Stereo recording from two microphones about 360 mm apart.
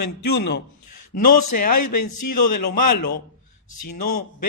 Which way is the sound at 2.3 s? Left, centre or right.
Left.